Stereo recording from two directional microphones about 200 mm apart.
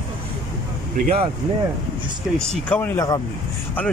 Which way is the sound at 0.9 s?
40° right (ahead or behind).